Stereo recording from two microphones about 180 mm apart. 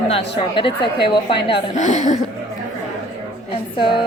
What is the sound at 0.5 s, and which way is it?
A woman's voice, 30° left (ahead or behind).